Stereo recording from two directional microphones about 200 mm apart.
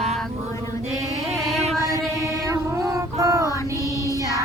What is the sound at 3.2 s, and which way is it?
Child singing, 15° right (ahead or behind).